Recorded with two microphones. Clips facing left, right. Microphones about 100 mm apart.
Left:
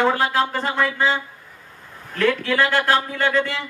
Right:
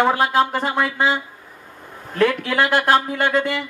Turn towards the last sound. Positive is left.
turn(degrees=-15)  # may be behind; listen again after turning